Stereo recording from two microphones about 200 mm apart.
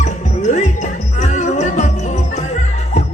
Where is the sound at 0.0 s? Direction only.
35° left (ahead or behind).